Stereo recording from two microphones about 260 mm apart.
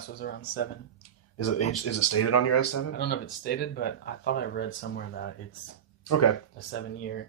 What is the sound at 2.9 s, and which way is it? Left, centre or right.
Speech, left.